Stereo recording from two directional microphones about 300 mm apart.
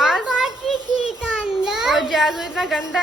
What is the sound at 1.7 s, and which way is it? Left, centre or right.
A child's voice, centre.